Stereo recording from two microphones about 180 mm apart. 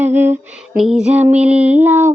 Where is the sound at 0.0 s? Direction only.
10° right (ahead or behind).